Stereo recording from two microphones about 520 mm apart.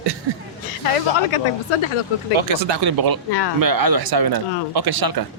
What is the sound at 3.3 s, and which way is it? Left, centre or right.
Speech, left.